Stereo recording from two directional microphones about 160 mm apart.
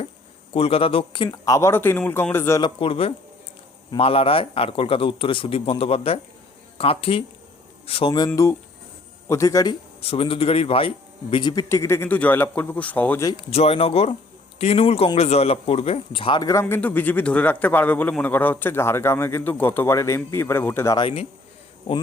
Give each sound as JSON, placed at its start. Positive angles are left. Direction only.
{"t": 0.5, "sound": "a man's voice", "side_deg": 35}
{"t": 2.6, "sound": "a man's voice", "side_deg": 30}
{"t": 8.3, "sound": "a man's voice", "side_deg": 15}
{"t": 10.0, "sound": "a man's voice", "side_deg": 35}
{"t": 13.5, "sound": "a man's voice", "side_deg": 40}
{"t": 21.0, "sound": "a man's voice", "side_deg": 35}